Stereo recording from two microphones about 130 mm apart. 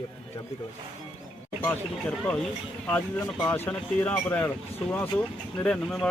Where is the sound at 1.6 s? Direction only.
10° left (ahead or behind).